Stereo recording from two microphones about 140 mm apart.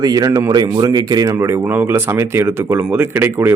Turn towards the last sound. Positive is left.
turn(degrees=-15)  # may be behind; listen again after turning